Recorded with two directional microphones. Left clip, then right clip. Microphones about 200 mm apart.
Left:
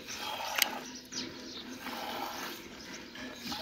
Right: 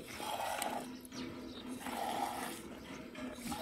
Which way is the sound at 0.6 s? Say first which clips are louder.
Left 8 dB; centre (ahead or behind).